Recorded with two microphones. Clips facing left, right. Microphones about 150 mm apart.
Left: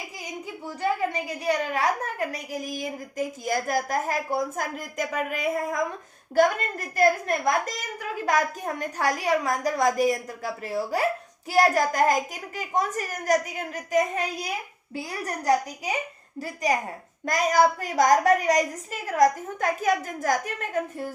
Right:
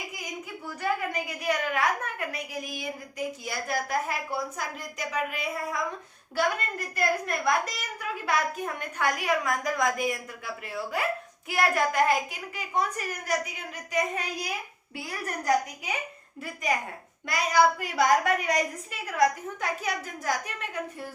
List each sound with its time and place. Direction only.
0.6 s a woman's voice: 25° left (ahead or behind); by 14.0 s 45° left (ahead or behind)
15.0 s a woman's voice: 35° left (ahead or behind)
17.2 s a woman's voice: 45° left (ahead or behind)